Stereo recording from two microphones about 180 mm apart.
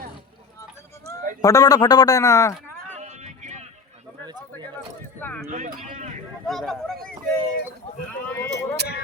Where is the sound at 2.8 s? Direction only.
40° right (ahead or behind).